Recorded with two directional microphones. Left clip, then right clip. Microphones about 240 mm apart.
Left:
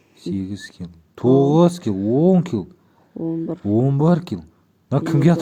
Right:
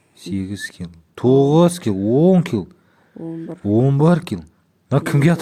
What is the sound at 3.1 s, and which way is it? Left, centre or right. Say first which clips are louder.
Speech: left 5 dB; left.